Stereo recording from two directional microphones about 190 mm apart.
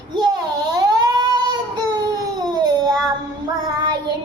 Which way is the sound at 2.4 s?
20° right (ahead or behind).